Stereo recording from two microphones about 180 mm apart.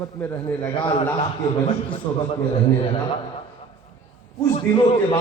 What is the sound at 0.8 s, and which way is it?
A man's voice, 25° left (ahead or behind).